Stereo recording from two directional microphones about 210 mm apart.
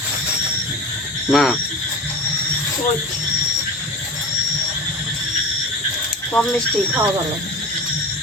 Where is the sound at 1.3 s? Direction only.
Centre (ahead or behind).